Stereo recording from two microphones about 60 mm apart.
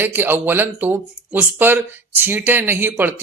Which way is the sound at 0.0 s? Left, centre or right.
Right.